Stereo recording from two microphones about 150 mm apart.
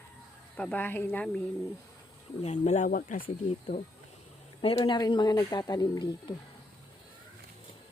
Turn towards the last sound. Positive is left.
turn(degrees=30)  # may be behind; listen again after turning